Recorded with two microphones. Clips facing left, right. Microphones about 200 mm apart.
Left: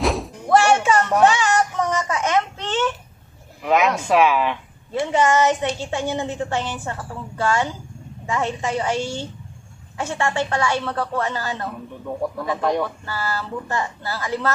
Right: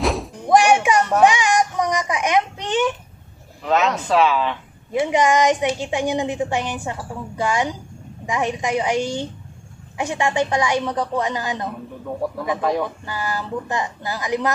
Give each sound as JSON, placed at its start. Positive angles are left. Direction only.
{"t": 0.0, "sound": "music", "side_deg": 0}
{"t": 0.5, "sound": "music", "side_deg": -15}
{"t": 1.1, "sound": "a sound", "side_deg": -15}
{"t": 3.6, "sound": "speech", "side_deg": 10}
{"t": 4.9, "sound": "a woman's voice", "side_deg": -15}
{"t": 12.5, "sound": "speech", "side_deg": 0}
{"t": 12.8, "sound": "a woman's voice", "side_deg": -15}